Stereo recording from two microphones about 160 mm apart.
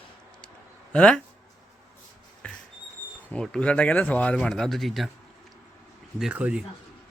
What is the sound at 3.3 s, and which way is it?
Speech, 5° left (ahead or behind).